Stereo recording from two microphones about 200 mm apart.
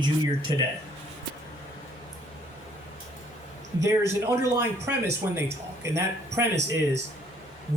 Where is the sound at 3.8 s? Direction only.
15° right (ahead or behind).